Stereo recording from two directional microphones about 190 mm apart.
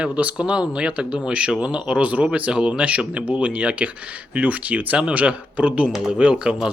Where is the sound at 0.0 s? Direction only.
5° right (ahead or behind).